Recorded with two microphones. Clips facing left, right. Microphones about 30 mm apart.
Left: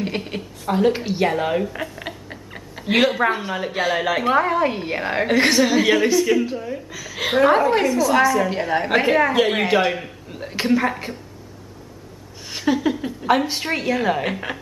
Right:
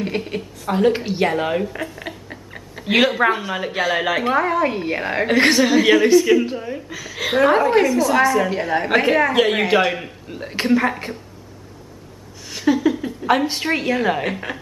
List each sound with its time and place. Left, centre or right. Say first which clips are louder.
0.0 s a woman's voice: right 2 dB; centre
2.8 s a woman's voice: right 2 dB; centre
4.3 s a woman's voice: left 1 dB; centre
5.3 s a woman's voice: right 2 dB; centre
7.3 s a woman's voice: right 1 dB; centre
12.6 s a woman's voice: right 3 dB; centre
14.2 s a woman's voice: even; centre